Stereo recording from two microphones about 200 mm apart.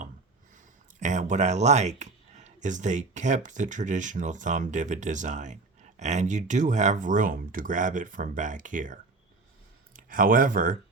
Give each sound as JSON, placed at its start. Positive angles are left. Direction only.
{"t": 0.5, "sound": "speech", "side_deg": -40}